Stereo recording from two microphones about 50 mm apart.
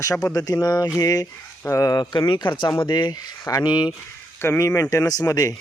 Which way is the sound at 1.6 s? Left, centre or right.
Left.